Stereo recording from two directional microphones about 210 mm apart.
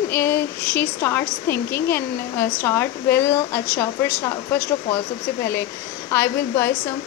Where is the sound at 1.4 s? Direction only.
50° left (ahead or behind).